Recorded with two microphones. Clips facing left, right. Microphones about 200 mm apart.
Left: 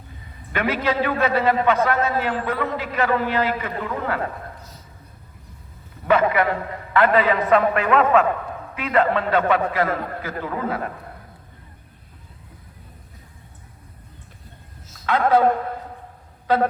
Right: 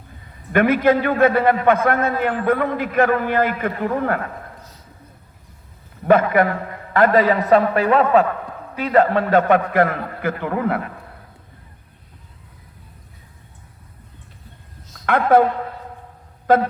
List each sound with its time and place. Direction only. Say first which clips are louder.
0.5 s a man's voice: right 7 dB; 50° right (ahead or behind)
6.1 s a man's voice: right 3 dB; 50° right (ahead or behind)
15.0 s a man's voice: right 3 dB; 55° right (ahead or behind)
16.5 s a man's voice: right 4 dB; 50° right (ahead or behind)